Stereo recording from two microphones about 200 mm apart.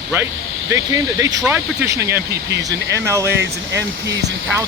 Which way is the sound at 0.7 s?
15° right (ahead or behind).